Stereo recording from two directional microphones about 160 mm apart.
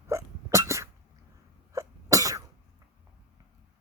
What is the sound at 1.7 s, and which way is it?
Cough, 20° right (ahead or behind).